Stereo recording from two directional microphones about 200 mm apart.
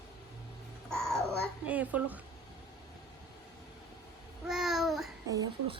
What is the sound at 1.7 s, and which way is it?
Speech, 5° right (ahead or behind).